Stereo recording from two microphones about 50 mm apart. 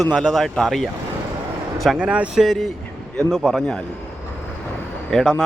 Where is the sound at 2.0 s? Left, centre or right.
Right.